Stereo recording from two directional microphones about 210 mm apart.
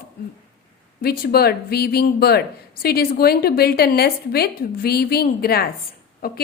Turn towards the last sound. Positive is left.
turn(degrees=45)  # may be behind; listen again after turning